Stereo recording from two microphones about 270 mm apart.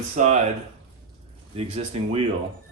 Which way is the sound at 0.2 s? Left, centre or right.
Right.